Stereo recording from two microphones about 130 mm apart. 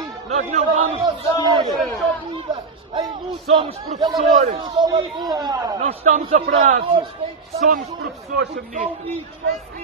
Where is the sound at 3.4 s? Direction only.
50° right (ahead or behind); by 5.7 s 30° right (ahead or behind).